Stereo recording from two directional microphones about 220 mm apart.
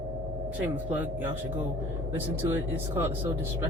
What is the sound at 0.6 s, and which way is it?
Speech, 10° right (ahead or behind).